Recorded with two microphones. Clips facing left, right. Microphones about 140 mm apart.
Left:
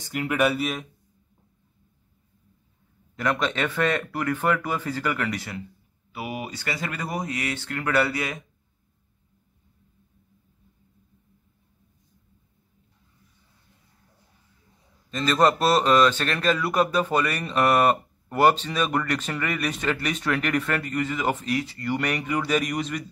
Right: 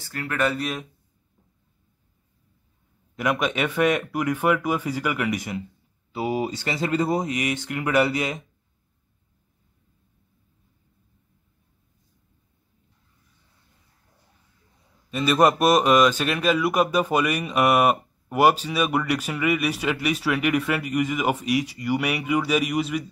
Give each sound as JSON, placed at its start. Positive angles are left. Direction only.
{"t": 0.0, "sound": "speech", "side_deg": 15}
{"t": 3.2, "sound": "a man's voice", "side_deg": -10}
{"t": 6.1, "sound": "speech", "side_deg": -30}
{"t": 15.0, "sound": "a man's voice", "side_deg": -10}